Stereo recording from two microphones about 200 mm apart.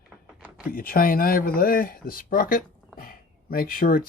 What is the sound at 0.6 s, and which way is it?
Speech, 45° left (ahead or behind).